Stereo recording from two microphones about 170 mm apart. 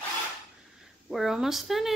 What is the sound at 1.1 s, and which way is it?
Speech, centre (ahead or behind).